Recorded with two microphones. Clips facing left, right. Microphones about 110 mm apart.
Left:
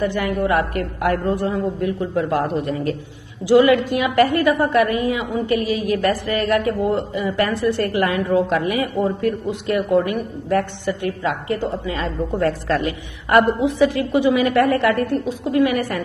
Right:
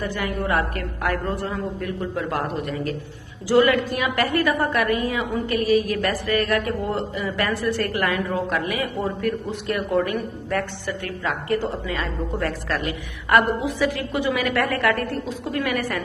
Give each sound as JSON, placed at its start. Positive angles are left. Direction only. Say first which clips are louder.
{"t": 0.0, "sound": "a woman's voice", "louder": "left 6 dB", "side_deg": 25}